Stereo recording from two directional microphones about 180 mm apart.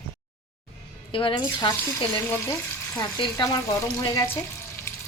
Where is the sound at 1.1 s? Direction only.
30° left (ahead or behind).